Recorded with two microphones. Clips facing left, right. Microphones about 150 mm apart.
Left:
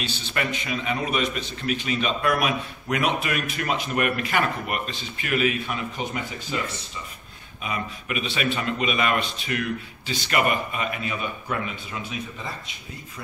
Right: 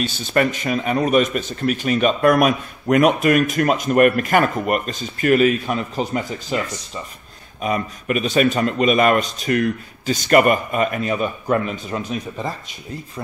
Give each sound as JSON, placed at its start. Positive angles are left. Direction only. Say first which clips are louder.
{"t": 0.0, "sound": "a man's voice", "louder": "right 9 dB", "side_deg": -45}
{"t": 7.6, "sound": "a man's voice", "louder": "right 9 dB", "side_deg": -45}